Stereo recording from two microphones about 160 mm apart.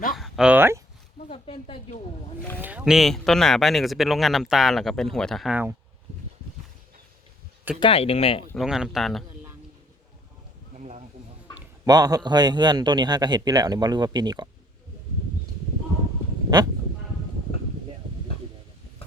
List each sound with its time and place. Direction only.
0.2 s speech: 5° right (ahead or behind)
1.3 s speech: 35° left (ahead or behind)
2.6 s speech: 10° right (ahead or behind)
7.8 s speech: 35° left (ahead or behind)
8.5 s speech: 5° right (ahead or behind)
10.8 s a sound: 45° right (ahead or behind)
11.9 s a man's voice: 25° right (ahead or behind)
16.5 s a man's voice: 25° right (ahead or behind)